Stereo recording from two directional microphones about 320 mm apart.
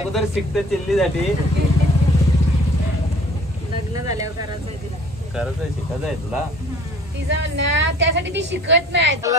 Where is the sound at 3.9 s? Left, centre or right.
Centre.